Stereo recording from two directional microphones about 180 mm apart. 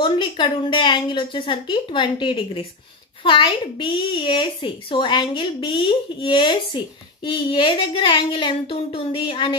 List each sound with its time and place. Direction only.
0.0 s speech: 25° left (ahead or behind)